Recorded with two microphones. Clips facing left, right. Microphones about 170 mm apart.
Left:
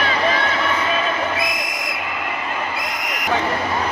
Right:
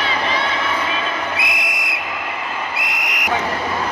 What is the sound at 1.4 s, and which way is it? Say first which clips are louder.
Whistle: left 1 dB; 70° right (ahead or behind).